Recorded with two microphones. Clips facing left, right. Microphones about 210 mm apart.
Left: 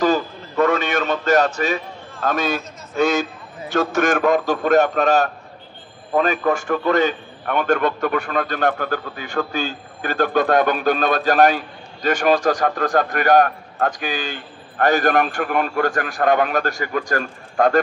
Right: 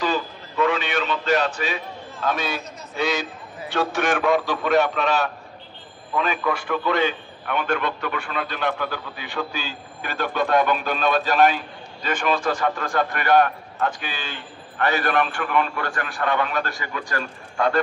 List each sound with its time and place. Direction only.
0.0 s a man's voice: 45° left (ahead or behind)